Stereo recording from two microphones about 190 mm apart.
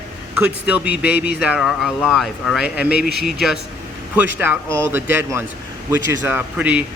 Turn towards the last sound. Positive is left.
turn(degrees=-5)  # may be behind; listen again after turning